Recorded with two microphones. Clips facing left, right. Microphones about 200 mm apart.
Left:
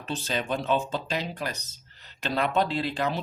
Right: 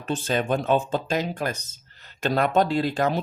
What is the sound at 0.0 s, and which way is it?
Speech, 50° right (ahead or behind).